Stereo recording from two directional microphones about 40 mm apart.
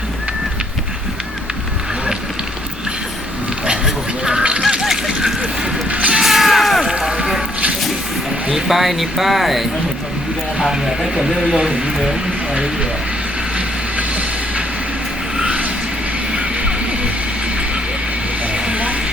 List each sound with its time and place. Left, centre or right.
4.2 s honk: centre
5.9 s music: right
6.2 s music: centre
8.5 s speech: centre; by 11.8 s right
13.9 s music: right
16.3 s music: right
18.5 s vehicle: right